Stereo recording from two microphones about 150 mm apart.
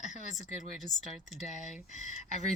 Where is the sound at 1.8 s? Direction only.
55° left (ahead or behind).